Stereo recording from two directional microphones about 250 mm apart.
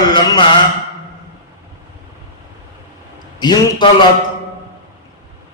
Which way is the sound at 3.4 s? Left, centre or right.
Centre.